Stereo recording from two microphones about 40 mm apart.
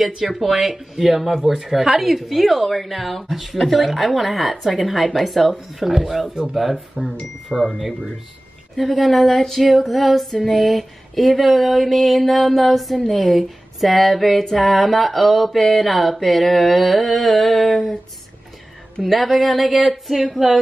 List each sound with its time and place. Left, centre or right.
0.3 s speech: centre
7.2 s speech: left
8.7 s speech: centre
19.0 s speech: centre